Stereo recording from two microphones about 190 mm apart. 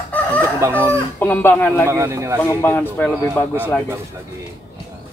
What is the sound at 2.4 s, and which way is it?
Speech, 15° left (ahead or behind).